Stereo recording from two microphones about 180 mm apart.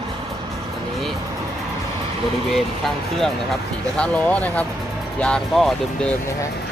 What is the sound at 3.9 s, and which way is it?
Speech, 5° left (ahead or behind).